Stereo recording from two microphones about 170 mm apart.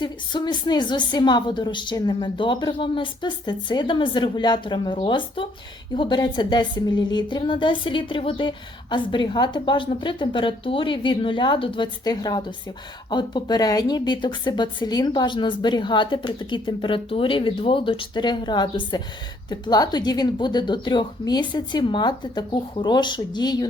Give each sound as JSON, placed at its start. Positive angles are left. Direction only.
{"t": 0.0, "sound": "a woman's voice", "side_deg": 25}